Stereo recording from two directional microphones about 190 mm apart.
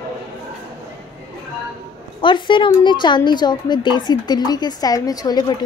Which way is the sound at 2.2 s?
25° left (ahead or behind).